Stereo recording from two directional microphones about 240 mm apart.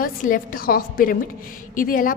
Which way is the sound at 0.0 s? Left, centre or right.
Left.